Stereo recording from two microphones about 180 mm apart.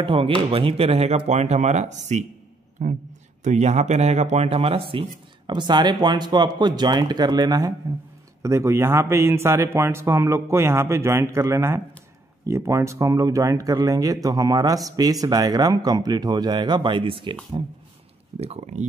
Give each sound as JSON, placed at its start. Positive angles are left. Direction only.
{"t": 0.0, "sound": "a man's voice", "side_deg": -30}
{"t": 18.4, "sound": "speech", "side_deg": -35}